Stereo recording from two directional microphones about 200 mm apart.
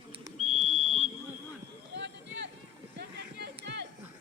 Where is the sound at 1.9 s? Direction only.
60° right (ahead or behind).